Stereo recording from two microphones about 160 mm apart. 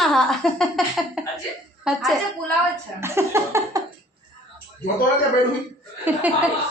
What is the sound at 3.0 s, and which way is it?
Speech, 15° right (ahead or behind).